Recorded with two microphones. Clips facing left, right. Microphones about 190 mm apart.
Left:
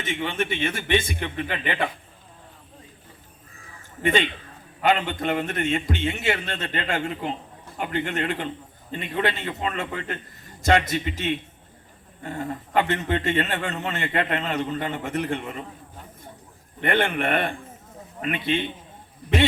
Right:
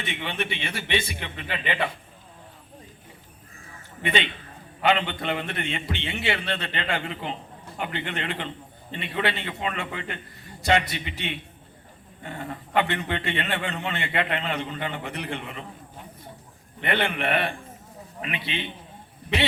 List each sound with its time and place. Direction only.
0.0 s a man's voice: 40° left (ahead or behind)
4.0 s a man's voice: 45° left (ahead or behind)
16.8 s a man's voice: 45° left (ahead or behind)